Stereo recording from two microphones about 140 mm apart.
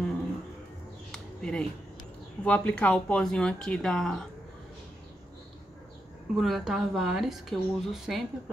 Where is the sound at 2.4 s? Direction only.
10° left (ahead or behind).